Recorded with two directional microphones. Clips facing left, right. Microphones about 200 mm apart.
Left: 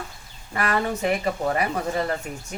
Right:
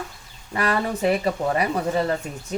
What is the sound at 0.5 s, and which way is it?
Speech, 30° right (ahead or behind).